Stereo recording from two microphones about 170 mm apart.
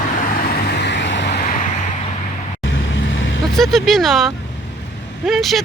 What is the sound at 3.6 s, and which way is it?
Speech, centre (ahead or behind).